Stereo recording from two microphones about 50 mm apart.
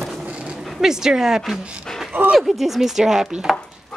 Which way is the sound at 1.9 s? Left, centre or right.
Centre.